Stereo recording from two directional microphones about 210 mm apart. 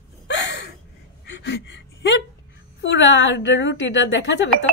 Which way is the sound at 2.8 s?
60° left (ahead or behind).